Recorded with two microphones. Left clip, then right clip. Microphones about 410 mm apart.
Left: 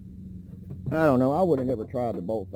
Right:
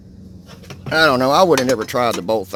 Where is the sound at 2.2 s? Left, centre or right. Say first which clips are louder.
Right 11 dB; right.